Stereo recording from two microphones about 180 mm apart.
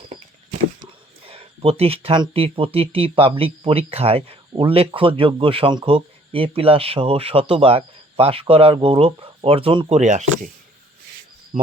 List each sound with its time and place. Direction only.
1.2 s speech: 30° right (ahead or behind)
11.5 s speech: 45° right (ahead or behind)